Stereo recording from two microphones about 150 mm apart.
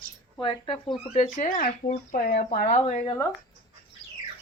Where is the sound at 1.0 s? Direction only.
50° left (ahead or behind); by 2.6 s 80° left.